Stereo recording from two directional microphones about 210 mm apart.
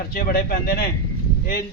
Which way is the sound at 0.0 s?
45° left (ahead or behind).